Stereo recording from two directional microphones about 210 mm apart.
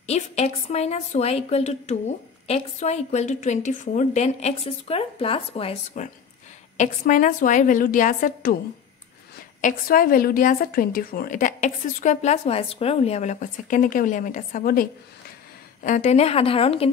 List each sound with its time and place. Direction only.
0.0 s a woman's voice: 30° left (ahead or behind)
9.6 s a woman's voice: 40° left (ahead or behind)